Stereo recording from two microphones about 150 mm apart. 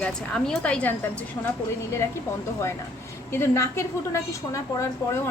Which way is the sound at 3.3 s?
15° left (ahead or behind).